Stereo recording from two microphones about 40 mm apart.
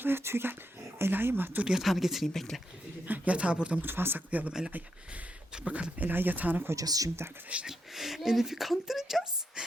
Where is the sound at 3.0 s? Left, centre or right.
Right.